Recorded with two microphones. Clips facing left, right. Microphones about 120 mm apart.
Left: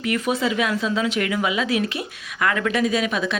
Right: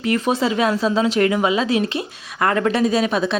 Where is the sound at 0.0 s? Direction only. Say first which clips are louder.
Right 3 dB; 30° right (ahead or behind).